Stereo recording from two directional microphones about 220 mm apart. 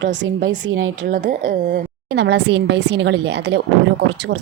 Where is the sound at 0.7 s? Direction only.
65° right (ahead or behind).